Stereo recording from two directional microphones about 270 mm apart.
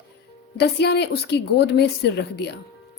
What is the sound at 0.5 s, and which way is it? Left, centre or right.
A woman's voice, left.